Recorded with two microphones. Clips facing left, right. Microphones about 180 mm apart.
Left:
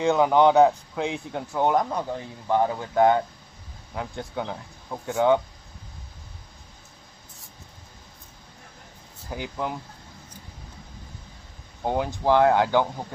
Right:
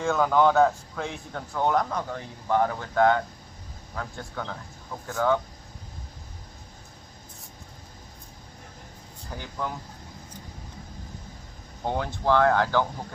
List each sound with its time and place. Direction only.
0.0 s speech: 20° left (ahead or behind)
9.3 s speech: 15° left (ahead or behind)
11.9 s speech: 15° left (ahead or behind)